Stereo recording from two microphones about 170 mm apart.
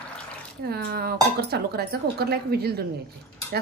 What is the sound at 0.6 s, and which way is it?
Speech, 65° right (ahead or behind).